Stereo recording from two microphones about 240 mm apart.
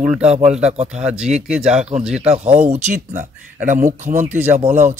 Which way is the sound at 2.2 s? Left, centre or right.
Right.